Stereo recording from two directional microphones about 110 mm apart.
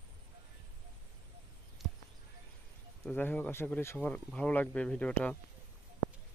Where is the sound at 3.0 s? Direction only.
15° left (ahead or behind).